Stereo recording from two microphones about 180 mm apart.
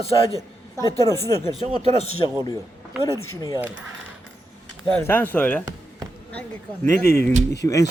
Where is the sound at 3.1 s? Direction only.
20° left (ahead or behind).